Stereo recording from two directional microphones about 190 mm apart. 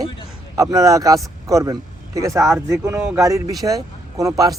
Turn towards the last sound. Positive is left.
turn(degrees=-15)  # may be behind; listen again after turning